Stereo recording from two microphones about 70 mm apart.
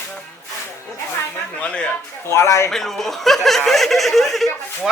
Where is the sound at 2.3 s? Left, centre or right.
Left.